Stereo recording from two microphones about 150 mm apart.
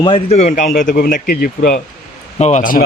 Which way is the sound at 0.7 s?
85° left.